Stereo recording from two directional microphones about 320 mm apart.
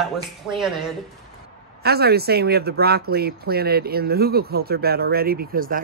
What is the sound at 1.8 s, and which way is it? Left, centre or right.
Speech, right.